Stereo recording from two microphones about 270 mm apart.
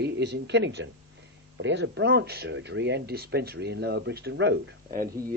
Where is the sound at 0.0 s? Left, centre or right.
Right.